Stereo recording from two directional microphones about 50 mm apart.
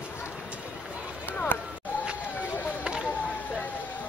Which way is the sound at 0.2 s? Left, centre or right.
Right.